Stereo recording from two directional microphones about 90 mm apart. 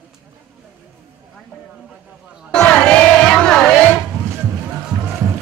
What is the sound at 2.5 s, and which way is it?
Music, 10° left (ahead or behind).